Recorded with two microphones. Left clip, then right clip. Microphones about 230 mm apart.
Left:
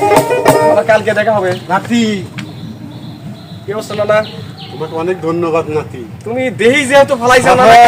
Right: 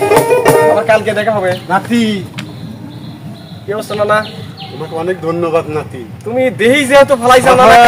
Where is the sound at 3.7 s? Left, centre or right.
Centre.